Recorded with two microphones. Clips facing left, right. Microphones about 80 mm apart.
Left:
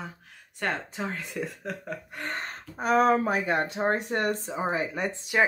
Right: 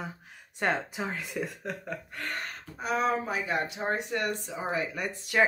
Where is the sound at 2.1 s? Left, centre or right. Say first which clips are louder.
Left 3 dB; left.